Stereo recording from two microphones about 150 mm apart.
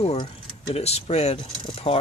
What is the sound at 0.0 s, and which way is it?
Speech, 45° left (ahead or behind).